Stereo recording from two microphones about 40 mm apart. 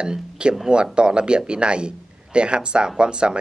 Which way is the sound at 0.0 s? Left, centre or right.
Right.